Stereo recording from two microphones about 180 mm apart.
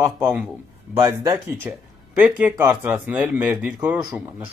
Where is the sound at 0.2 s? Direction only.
10° right (ahead or behind).